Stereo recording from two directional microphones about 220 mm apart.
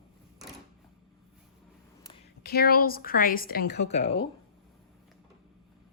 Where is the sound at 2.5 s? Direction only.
45° left (ahead or behind).